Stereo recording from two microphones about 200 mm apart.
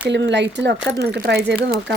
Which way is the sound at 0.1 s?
60° right (ahead or behind).